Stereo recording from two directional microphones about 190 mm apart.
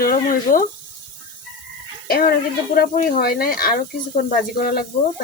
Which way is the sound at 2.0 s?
50° left (ahead or behind).